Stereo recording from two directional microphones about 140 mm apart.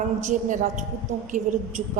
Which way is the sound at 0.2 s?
65° right (ahead or behind).